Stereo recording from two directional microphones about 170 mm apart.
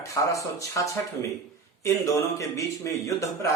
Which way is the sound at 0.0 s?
20° left (ahead or behind).